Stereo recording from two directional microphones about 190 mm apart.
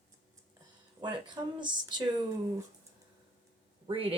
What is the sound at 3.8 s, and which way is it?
Speech, 30° right (ahead or behind).